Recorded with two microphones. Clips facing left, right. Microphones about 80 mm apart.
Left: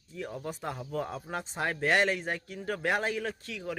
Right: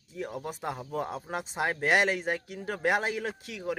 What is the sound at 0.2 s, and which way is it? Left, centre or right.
Speech, centre.